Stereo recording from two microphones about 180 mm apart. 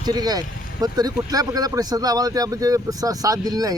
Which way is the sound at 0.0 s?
20° right (ahead or behind).